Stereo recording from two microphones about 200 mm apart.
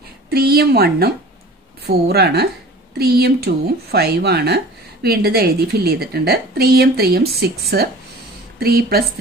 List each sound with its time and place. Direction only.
0.3 s a woman's voice: 50° right (ahead or behind)